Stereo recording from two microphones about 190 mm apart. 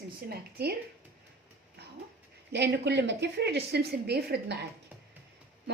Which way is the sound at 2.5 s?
65° right (ahead or behind).